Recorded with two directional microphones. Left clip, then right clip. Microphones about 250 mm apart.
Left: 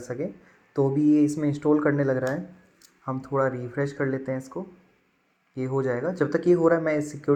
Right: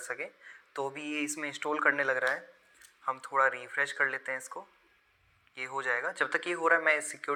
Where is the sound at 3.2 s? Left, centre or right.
Right.